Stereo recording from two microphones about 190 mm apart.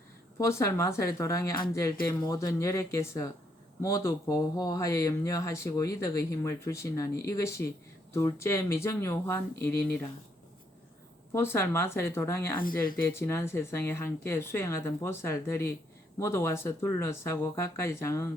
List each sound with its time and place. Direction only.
0.3 s speech: 15° left (ahead or behind)
11.3 s speech: 15° left (ahead or behind)
12.5 s speech: 50° left (ahead or behind)
13.1 s speech: 15° left (ahead or behind)